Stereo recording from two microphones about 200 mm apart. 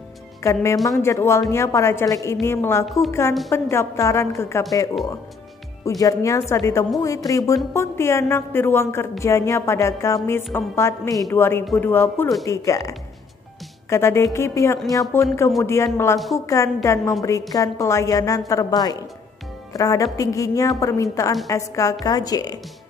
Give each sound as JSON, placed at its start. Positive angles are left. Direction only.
{"t": 0.4, "sound": "a woman's voice", "side_deg": 15}
{"t": 0.8, "sound": "music", "side_deg": 15}
{"t": 5.9, "sound": "music", "side_deg": 15}
{"t": 18.5, "sound": "a woman's voice", "side_deg": 20}
{"t": 19.7, "sound": "music", "side_deg": 15}
{"t": 22.0, "sound": "a woman's voice", "side_deg": 20}